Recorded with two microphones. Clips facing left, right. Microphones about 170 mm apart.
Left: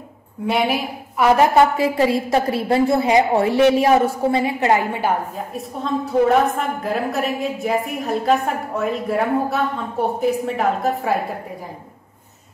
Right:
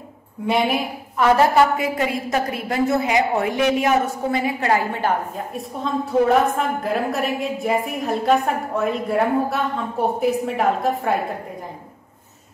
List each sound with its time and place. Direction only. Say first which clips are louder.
0.5 s a woman's voice: even; centre (ahead or behind)
1.5 s a woman's voice: left 2 dB; 25° left (ahead or behind)
6.0 s a woman's voice: left 1 dB; centre (ahead or behind)